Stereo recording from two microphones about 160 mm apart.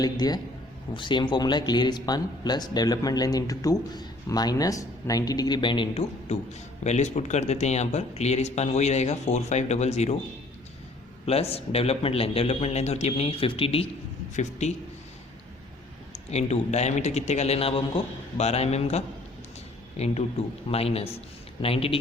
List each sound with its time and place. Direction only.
0.0 s speech: 25° left (ahead or behind); by 10.2 s 45° left (ahead or behind)
11.3 s a man's voice: 40° left (ahead or behind)
16.1 s a man's voice: 45° left (ahead or behind)